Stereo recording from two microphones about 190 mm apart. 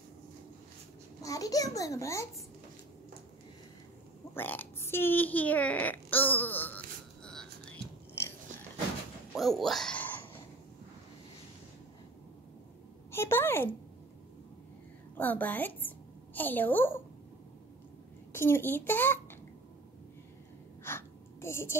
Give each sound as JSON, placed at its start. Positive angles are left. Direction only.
{"t": 1.2, "sound": "babbling", "side_deg": 20}
{"t": 1.8, "sound": "a child's voice", "side_deg": 15}
{"t": 4.3, "sound": "speech", "side_deg": 10}
{"t": 7.2, "sound": "music", "side_deg": 5}
{"t": 9.3, "sound": "a sound", "side_deg": 0}
{"t": 13.1, "sound": "a sound", "side_deg": 10}
{"t": 15.1, "sound": "a woman's voice", "side_deg": 10}
{"t": 18.3, "sound": "a child's voice", "side_deg": 10}
{"t": 20.8, "sound": "a sound", "side_deg": 15}